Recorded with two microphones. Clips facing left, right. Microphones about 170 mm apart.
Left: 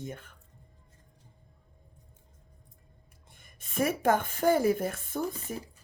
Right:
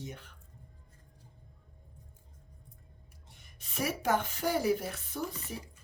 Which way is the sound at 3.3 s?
50° left (ahead or behind).